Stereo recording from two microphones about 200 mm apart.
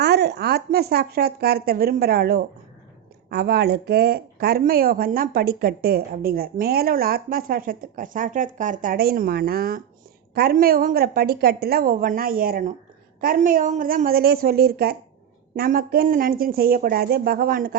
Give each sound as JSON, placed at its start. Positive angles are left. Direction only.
{"t": 0.0, "sound": "speech", "side_deg": -55}